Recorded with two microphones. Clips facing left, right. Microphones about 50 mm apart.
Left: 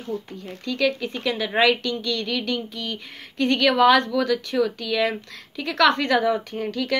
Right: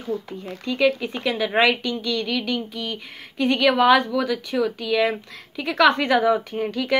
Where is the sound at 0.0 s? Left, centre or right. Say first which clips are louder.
Right 2 dB; centre.